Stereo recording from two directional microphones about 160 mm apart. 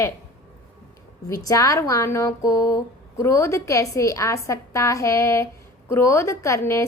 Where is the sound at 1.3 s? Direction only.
20° left (ahead or behind).